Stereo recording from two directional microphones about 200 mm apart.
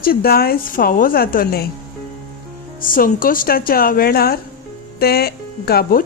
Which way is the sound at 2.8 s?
45° left (ahead or behind).